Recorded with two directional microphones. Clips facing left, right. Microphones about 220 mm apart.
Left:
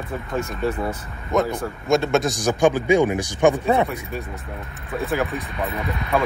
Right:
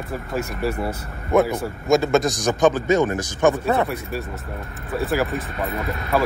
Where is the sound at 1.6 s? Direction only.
Centre (ahead or behind).